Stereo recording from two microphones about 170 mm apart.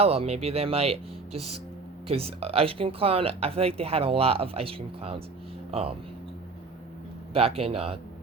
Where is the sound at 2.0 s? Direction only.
35° right (ahead or behind).